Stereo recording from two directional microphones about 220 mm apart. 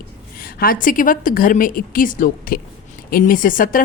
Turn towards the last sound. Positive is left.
turn(degrees=40)  # may be behind; listen again after turning